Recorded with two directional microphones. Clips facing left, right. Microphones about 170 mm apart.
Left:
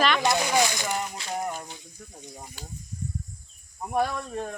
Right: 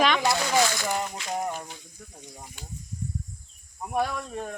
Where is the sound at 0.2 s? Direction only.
20° left (ahead or behind).